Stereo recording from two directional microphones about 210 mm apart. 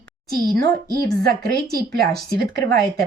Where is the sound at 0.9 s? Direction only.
45° right (ahead or behind).